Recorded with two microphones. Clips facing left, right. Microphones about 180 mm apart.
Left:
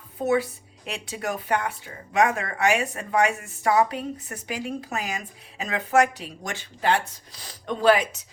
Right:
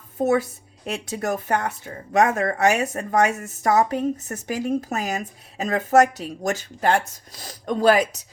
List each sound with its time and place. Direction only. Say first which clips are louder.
0.2 s speech: right 3 dB; 45° right (ahead or behind)